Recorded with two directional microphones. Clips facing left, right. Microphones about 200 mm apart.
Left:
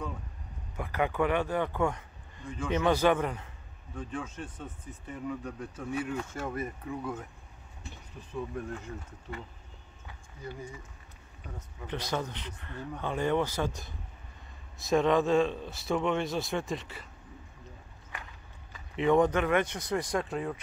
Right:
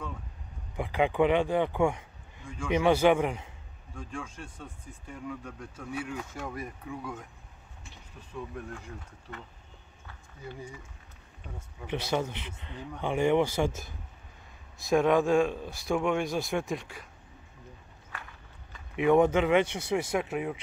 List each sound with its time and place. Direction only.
0.7 s speech: 15° right (ahead or behind)
3.9 s speech: 5° left (ahead or behind)
8.4 s speech: centre (ahead or behind)
11.8 s speech: 10° right (ahead or behind)
14.8 s speech: centre (ahead or behind)
18.9 s speech: 10° right (ahead or behind)